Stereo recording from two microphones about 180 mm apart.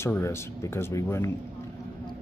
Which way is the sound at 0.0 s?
15° left (ahead or behind).